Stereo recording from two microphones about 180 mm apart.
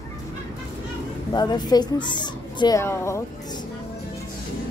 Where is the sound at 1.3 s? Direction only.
25° left (ahead or behind).